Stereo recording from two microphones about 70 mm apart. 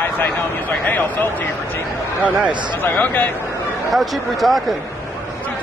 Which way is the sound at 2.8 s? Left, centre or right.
Left.